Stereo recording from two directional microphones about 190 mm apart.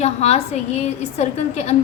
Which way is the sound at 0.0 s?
35° left (ahead or behind).